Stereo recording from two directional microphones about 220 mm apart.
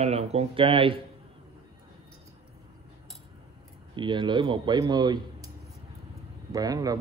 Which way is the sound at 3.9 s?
20° right (ahead or behind).